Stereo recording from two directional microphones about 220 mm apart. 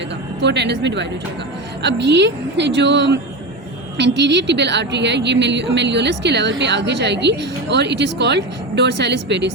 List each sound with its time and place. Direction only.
0.4 s a woman's voice: 50° right (ahead or behind)